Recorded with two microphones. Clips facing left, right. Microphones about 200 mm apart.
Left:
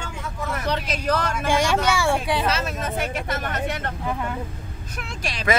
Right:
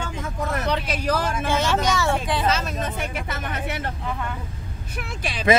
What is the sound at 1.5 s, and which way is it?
Speech, 15° left (ahead or behind).